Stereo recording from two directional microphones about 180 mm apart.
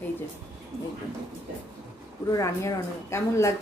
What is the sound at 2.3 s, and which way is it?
A woman's voice, 15° left (ahead or behind).